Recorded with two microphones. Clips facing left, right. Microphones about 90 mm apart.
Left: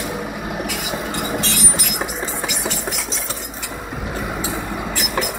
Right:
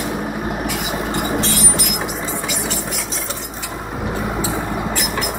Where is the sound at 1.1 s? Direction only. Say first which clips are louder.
Right 4 dB; 35° right (ahead or behind).